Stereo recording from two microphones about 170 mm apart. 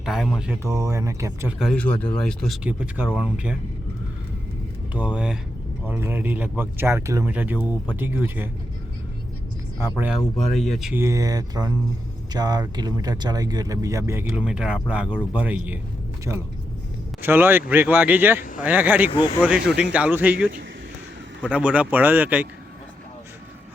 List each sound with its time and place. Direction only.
0.0 s speech: centre (ahead or behind)
0.6 s speech: 20° right (ahead or behind)
1.5 s speech: centre (ahead or behind)
2.6 s speech: 5° right (ahead or behind)
4.9 s speech: 5° right (ahead or behind)
10.6 s speech: centre (ahead or behind)
10.9 s speech: 15° right (ahead or behind); by 16.4 s centre (ahead or behind)
17.2 s speech: 10° right (ahead or behind)
21.5 s speech: 5° right (ahead or behind)